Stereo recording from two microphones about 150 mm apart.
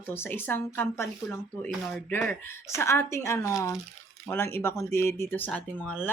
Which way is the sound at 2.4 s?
15° left (ahead or behind).